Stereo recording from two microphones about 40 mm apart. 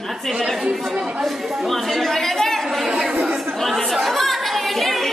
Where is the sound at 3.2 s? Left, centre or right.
Right.